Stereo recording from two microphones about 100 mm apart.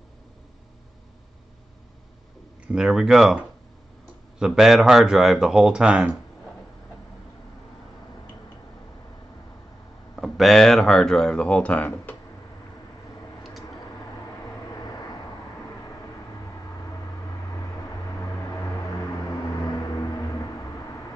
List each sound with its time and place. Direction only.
2.6 s speech: 5° right (ahead or behind)
4.4 s speech: 5° right (ahead or behind)
10.1 s speech: centre (ahead or behind)
13.4 s vehicle: centre (ahead or behind)
14.3 s vehicle: 40° left (ahead or behind)
18.2 s vehicle: 30° left (ahead or behind)
19.8 s a sound: 35° left (ahead or behind)